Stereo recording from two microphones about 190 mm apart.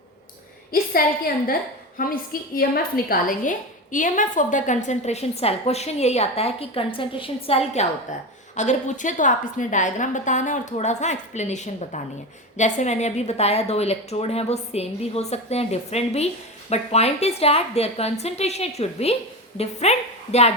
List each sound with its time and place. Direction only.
2.0 s a woman's voice: 50° left (ahead or behind)